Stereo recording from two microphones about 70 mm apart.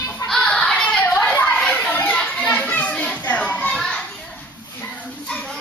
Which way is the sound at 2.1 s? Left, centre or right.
Centre.